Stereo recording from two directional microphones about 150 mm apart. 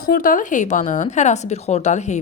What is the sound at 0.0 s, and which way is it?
Speech, 70° left (ahead or behind).